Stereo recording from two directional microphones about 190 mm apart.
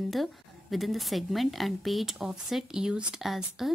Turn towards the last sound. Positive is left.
turn(degrees=0)  # may be behind; listen again after turning